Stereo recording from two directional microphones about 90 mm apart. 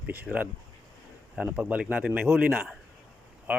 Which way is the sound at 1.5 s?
20° right (ahead or behind).